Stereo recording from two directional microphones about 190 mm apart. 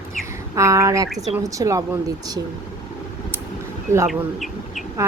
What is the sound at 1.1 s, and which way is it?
Speech, centre (ahead or behind).